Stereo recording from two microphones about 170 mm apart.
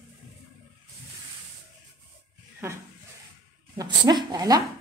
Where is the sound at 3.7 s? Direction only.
25° right (ahead or behind).